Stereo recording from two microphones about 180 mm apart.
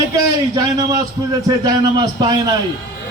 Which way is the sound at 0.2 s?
20° right (ahead or behind).